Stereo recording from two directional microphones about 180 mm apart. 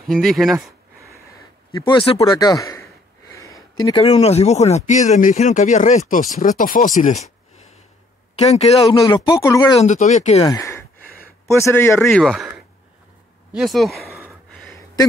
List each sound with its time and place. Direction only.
0.0 s speech: centre (ahead or behind)
1.9 s speech: 30° left (ahead or behind)
3.3 s a sound: 15° left (ahead or behind)
3.8 s speech: 30° left (ahead or behind); by 7.2 s 45° left (ahead or behind)
8.4 s speech: 35° left (ahead or behind)
8.8 s speech: 25° left (ahead or behind)
9.8 s speech: 40° left (ahead or behind)
10.4 s a man's voice: 20° left (ahead or behind)
12.2 s speech: centre (ahead or behind)
13.6 s speech: centre (ahead or behind)